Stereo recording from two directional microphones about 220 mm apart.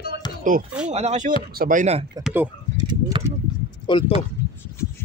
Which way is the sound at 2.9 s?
20° right (ahead or behind).